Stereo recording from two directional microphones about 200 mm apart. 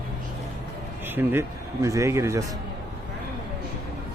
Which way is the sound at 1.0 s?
10° right (ahead or behind).